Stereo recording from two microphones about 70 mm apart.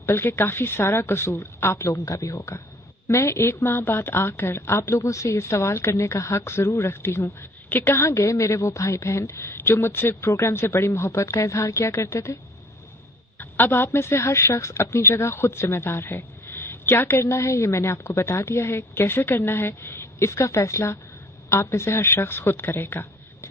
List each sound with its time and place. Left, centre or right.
0.0 s a woman's voice: left
13.4 s a woman's voice: left